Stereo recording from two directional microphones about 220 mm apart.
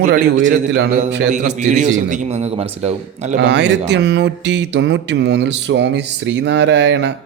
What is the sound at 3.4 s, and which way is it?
Mantra, 50° right (ahead or behind).